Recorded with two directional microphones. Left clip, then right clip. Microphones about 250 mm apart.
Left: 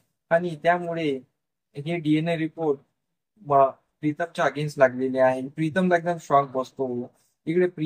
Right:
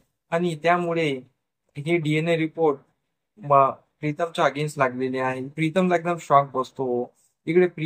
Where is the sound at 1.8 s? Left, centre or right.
Centre.